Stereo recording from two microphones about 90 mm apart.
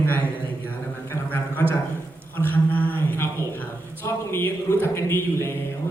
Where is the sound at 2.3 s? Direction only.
20° left (ahead or behind).